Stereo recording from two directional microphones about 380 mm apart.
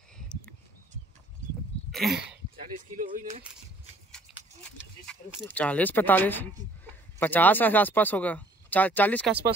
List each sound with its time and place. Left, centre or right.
1.9 s sneeze: centre
3.0 s speech: centre
4.1 s speech: centre